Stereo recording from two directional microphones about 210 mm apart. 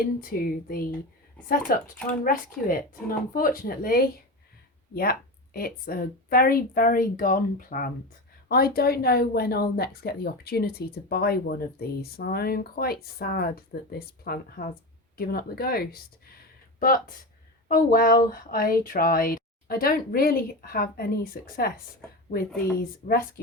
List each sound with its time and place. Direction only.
0.0 s speech: 45° left (ahead or behind)
5.5 s speech: 45° left (ahead or behind)
23.0 s speech: 40° left (ahead or behind)